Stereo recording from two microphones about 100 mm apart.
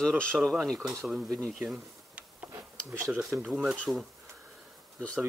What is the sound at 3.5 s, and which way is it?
Speech, 15° right (ahead or behind).